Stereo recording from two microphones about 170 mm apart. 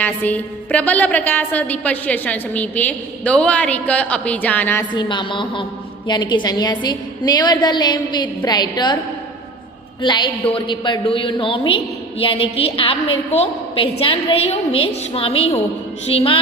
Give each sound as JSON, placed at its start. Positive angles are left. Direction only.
{"t": 0.0, "sound": "a woman's voice", "side_deg": 10}
{"t": 4.9, "sound": "a woman's voice", "side_deg": 25}
{"t": 10.0, "sound": "a woman's voice", "side_deg": 25}